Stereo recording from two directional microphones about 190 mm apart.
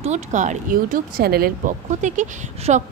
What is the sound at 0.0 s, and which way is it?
Speech, 40° right (ahead or behind).